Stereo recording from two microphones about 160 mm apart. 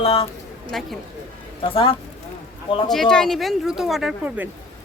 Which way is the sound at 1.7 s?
35° left (ahead or behind).